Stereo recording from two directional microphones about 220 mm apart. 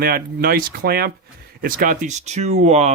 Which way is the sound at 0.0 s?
45° right (ahead or behind).